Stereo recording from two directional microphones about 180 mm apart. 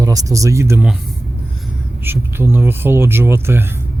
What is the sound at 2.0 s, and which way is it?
Speech, 10° right (ahead or behind).